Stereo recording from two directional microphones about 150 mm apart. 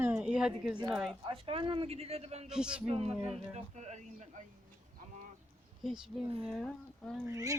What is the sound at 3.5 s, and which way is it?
Speech, 50° right (ahead or behind).